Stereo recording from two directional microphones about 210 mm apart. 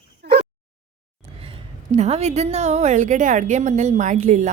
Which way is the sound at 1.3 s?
25° right (ahead or behind).